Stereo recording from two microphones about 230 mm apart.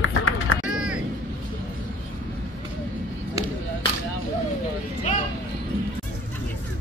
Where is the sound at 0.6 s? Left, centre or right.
Centre.